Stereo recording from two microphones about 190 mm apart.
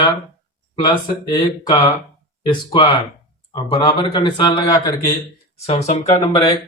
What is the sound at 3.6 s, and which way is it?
A man's voice, 25° left (ahead or behind).